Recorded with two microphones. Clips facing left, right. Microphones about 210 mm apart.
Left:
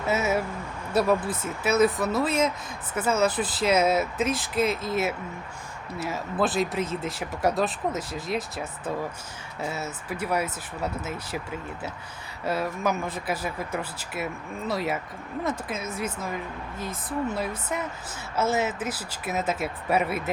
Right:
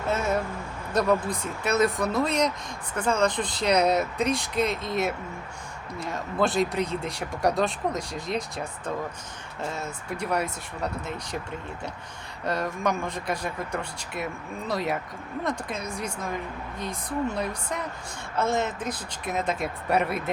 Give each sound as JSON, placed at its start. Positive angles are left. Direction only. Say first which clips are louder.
{"t": 0.0, "sound": "speech", "louder": "left 1 dB", "side_deg": 5}
{"t": 12.5, "sound": "speech", "louder": "even", "side_deg": 5}